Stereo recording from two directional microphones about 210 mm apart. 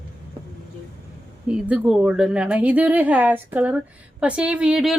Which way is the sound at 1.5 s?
5° right (ahead or behind).